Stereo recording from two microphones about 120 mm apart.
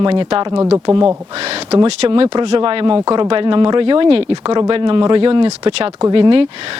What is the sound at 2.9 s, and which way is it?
Speech, 30° right (ahead or behind).